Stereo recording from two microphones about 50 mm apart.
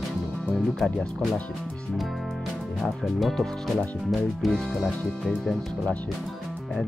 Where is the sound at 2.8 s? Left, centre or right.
Centre.